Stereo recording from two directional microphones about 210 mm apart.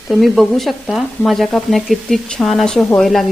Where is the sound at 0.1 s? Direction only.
Centre (ahead or behind).